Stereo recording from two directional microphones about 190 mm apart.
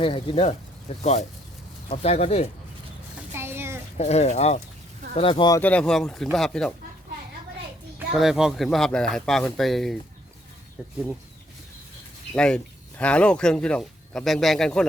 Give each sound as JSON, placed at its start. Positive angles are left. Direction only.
{"t": 0.0, "sound": "speech", "side_deg": 30}
{"t": 3.3, "sound": "a sound", "side_deg": -10}
{"t": 3.9, "sound": "speech", "side_deg": 35}
{"t": 5.5, "sound": "speech", "side_deg": 10}
{"t": 7.9, "sound": "speech", "side_deg": 0}
{"t": 12.3, "sound": "speech", "side_deg": 5}